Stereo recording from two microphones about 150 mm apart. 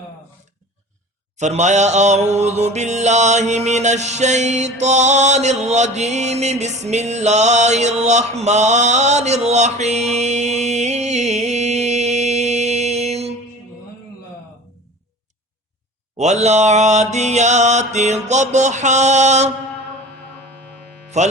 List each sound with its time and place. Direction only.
1.4 s mantra: 50° right (ahead or behind)
16.1 s mantra: 50° right (ahead or behind)
21.2 s mantra: 50° right (ahead or behind)